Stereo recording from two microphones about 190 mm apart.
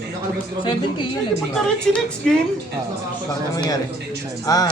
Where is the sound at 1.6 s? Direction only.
Centre (ahead or behind).